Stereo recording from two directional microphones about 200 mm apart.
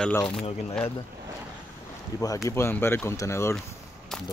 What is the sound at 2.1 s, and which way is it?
Speech, 15° left (ahead or behind).